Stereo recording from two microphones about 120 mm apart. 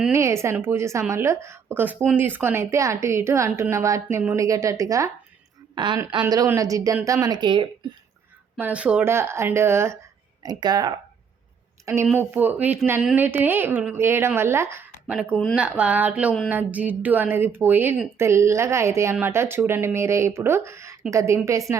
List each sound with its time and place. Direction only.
0.1 s a woman's voice: 25° right (ahead or behind)
5.7 s a woman's voice: 40° right (ahead or behind)
8.5 s a woman's voice: 15° right (ahead or behind)
10.4 s speech: 35° right (ahead or behind)
12.1 s a woman's voice: 15° right (ahead or behind)
15.0 s a woman's voice: 10° right (ahead or behind)